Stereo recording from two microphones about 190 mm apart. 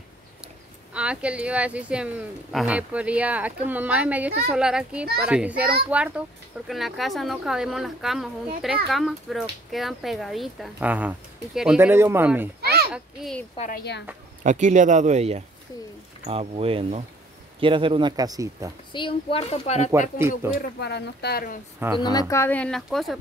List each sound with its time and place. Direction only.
0.9 s speech: 5° right (ahead or behind)
12.9 s speech: centre (ahead or behind)
13.6 s a woman's voice: 50° left (ahead or behind)
14.4 s speech: 40° right (ahead or behind); by 18.7 s 20° right (ahead or behind)
18.9 s speech: 30° left (ahead or behind)
20.2 s speech: 10° right (ahead or behind)
20.8 s speech: 60° left (ahead or behind)
21.7 s speech: 10° right (ahead or behind)
22.3 s speech: 10° left (ahead or behind)